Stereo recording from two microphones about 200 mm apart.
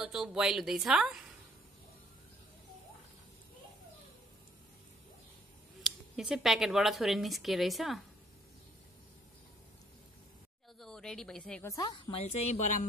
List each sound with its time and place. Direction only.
0.0 s speech: 5° right (ahead or behind)
5.9 s speech: centre (ahead or behind)
10.8 s a woman's voice: 5° left (ahead or behind)
11.7 s a woman's voice: 20° left (ahead or behind)
12.2 s speech: 35° left (ahead or behind)